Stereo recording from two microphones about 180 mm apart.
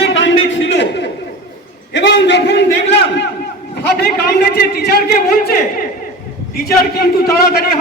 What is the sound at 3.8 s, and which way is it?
A man's voice, 60° left (ahead or behind).